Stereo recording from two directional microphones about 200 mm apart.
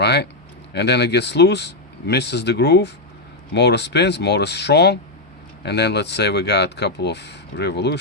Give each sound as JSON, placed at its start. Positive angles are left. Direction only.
{"t": 0.0, "sound": "speech", "side_deg": 55}